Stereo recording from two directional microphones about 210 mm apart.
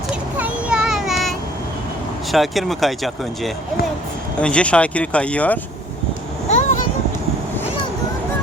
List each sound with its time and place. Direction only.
0.3 s child singing: 5° right (ahead or behind)
2.3 s speech: centre (ahead or behind)
6.5 s a sound: 35° left (ahead or behind)